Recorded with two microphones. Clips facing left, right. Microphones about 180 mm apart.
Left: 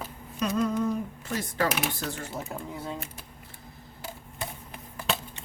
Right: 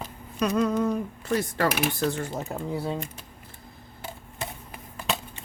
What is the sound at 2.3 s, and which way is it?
Speech, 30° right (ahead or behind).